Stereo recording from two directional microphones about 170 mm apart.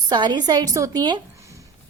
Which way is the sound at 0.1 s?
25° right (ahead or behind).